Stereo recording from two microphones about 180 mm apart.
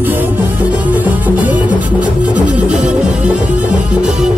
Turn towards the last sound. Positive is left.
turn(degrees=0)  # may be behind; listen again after turning